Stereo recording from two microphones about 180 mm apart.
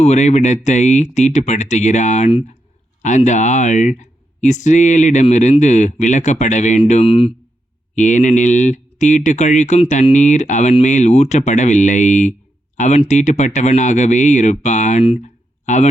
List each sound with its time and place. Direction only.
0.0 s speech: 40° left (ahead or behind)
7.9 s speech: 45° left (ahead or behind)